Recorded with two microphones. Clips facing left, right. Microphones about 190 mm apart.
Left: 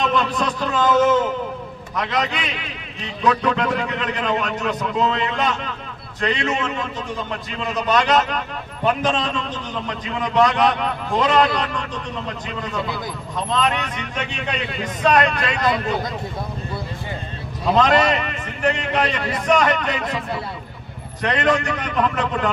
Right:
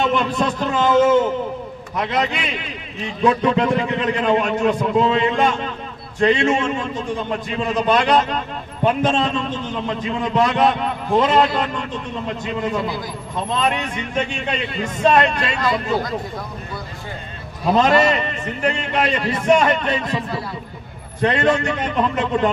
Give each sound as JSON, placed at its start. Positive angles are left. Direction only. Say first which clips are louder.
{"t": 0.0, "sound": "a man's voice", "louder": "right 2 dB", "side_deg": -25}
{"t": 13.6, "sound": "a man's voice", "louder": "right 1 dB", "side_deg": -30}
{"t": 17.7, "sound": "a man's voice", "louder": "right 1 dB", "side_deg": -25}
{"t": 21.2, "sound": "a man's voice", "louder": "right 2 dB", "side_deg": -25}